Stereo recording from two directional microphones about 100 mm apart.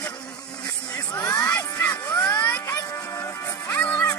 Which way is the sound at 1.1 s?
35° left (ahead or behind).